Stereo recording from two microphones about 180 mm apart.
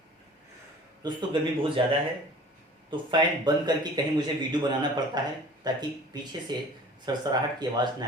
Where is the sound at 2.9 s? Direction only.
25° right (ahead or behind).